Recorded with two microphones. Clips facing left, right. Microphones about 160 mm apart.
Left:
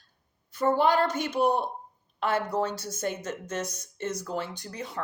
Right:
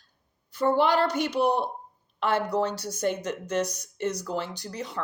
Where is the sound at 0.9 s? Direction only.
30° right (ahead or behind).